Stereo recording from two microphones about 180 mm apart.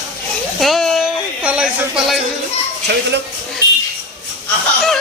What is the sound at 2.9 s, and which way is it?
Speech, 65° right (ahead or behind).